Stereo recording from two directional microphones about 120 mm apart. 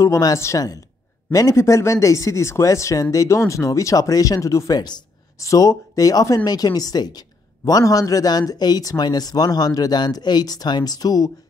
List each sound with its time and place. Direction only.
0.0 s a woman's voice: 25° left (ahead or behind)